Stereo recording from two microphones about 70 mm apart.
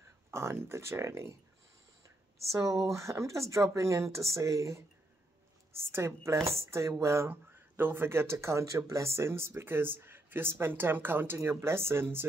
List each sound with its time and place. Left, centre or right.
0.3 s speech: right
2.5 s speech: right